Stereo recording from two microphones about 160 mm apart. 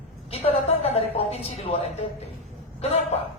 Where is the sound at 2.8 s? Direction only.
40° left (ahead or behind).